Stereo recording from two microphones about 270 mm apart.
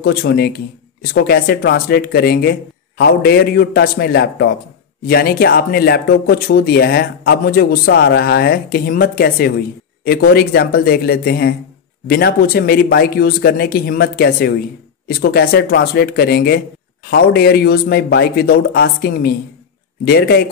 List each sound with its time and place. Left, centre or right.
0.0 s speech: left